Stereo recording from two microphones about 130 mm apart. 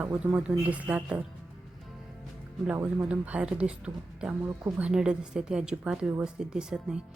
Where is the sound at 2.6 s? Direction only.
10° right (ahead or behind).